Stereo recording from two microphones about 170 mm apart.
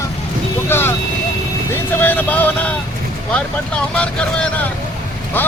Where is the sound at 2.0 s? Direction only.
10° left (ahead or behind).